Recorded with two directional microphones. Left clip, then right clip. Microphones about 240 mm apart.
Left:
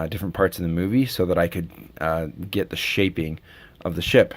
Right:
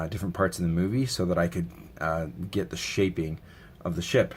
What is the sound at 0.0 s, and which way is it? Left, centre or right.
Speech, left.